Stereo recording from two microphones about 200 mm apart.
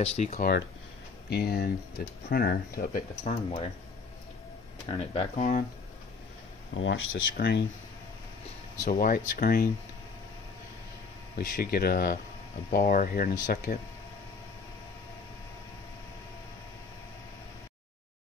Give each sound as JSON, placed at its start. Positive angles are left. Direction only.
{"t": 0.0, "sound": "speech", "side_deg": 35}
{"t": 0.4, "sound": "speech", "side_deg": 50}
{"t": 4.8, "sound": "speech", "side_deg": 30}
{"t": 6.7, "sound": "speech", "side_deg": 75}
{"t": 7.3, "sound": "speech", "side_deg": 55}
{"t": 8.8, "sound": "speech", "side_deg": 45}
{"t": 11.3, "sound": "speech", "side_deg": 50}